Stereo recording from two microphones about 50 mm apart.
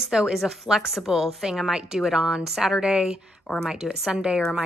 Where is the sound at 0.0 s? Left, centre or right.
Centre.